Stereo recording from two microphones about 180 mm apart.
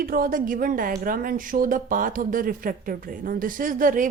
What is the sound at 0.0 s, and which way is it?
A woman's voice, 50° right (ahead or behind).